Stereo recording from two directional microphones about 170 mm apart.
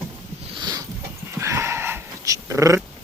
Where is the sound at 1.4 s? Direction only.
15° right (ahead or behind).